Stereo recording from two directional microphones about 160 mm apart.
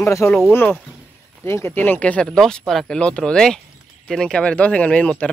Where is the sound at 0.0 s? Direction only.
15° left (ahead or behind).